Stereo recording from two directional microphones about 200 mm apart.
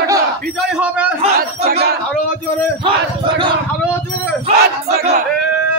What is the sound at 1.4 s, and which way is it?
Speech, 50° right (ahead or behind).